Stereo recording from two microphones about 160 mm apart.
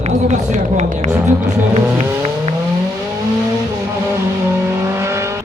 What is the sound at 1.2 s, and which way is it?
Vehicle, 45° right (ahead or behind).